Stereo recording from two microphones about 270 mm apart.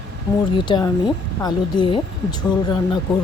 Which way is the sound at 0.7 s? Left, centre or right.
Centre.